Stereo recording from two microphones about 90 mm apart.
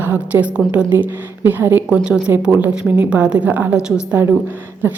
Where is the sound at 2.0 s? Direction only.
10° right (ahead or behind).